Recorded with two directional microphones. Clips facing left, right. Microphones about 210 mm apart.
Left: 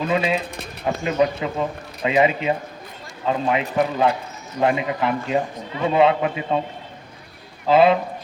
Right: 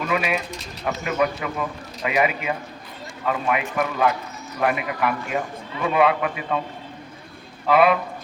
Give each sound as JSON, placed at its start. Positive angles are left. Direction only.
{"t": 0.0, "sound": "a man's voice", "side_deg": 25}
{"t": 7.7, "sound": "a man's voice", "side_deg": 25}